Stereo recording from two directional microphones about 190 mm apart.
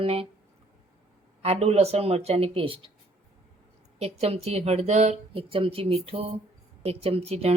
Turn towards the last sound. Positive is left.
turn(degrees=-35)  # may be behind; listen again after turning